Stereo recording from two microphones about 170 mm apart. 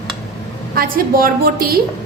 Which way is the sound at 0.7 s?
60° right (ahead or behind).